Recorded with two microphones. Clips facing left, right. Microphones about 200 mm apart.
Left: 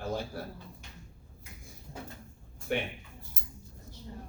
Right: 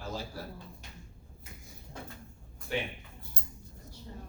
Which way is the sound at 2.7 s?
55° left (ahead or behind).